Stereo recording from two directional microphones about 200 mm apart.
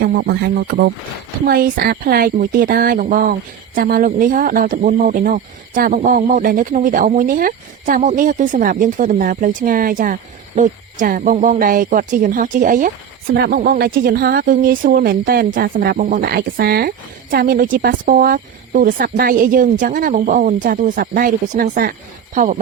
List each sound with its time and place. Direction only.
0.0 s speech: 50° right (ahead or behind)